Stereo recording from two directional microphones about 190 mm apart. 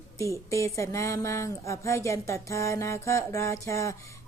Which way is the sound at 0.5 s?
15° left (ahead or behind).